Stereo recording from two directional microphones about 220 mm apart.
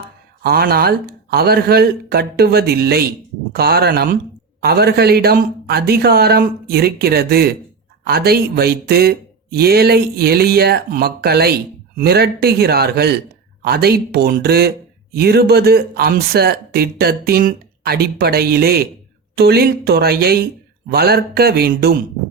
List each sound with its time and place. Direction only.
0.4 s speech: 45° right (ahead or behind)